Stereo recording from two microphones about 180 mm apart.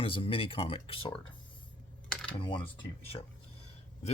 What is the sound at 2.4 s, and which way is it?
Speech, 25° left (ahead or behind).